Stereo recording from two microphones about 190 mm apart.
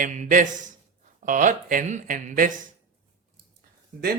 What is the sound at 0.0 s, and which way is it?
A man's voice, 45° right (ahead or behind).